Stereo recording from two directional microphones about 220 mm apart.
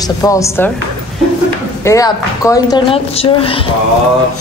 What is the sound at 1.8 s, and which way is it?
Speech, 15° left (ahead or behind).